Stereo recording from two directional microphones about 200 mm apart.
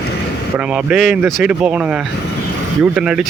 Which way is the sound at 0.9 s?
Centre (ahead or behind).